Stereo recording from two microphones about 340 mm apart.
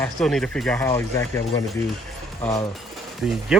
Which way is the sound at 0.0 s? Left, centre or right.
Centre.